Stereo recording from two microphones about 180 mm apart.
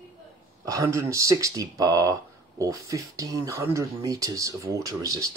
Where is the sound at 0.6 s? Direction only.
15° right (ahead or behind).